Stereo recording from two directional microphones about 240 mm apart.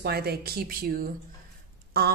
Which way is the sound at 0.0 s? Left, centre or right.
Right.